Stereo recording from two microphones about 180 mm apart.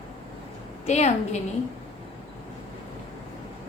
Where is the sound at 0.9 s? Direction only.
40° left (ahead or behind).